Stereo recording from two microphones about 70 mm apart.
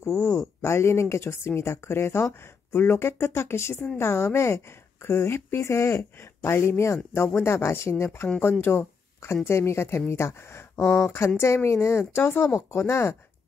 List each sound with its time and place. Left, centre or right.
0.0 s speech: left